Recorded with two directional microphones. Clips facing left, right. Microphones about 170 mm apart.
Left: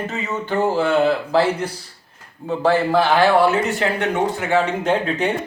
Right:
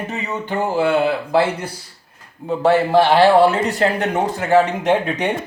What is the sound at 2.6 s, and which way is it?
Speech, 25° right (ahead or behind).